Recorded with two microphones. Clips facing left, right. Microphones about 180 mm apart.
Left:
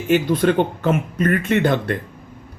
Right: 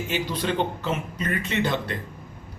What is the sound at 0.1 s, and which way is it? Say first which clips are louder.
Speech: left 12 dB; 50° left (ahead or behind).